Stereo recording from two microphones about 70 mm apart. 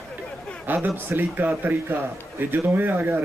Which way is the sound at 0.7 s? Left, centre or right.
Right.